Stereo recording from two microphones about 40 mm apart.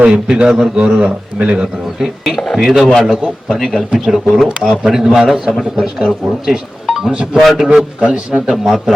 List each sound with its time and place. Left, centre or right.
0.0 s a man's voice: right
2.0 s speech: centre
4.4 s a man's voice: right
4.9 s speech: centre
7.6 s speech: centre